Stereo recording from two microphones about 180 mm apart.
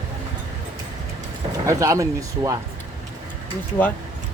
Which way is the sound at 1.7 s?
20° right (ahead or behind).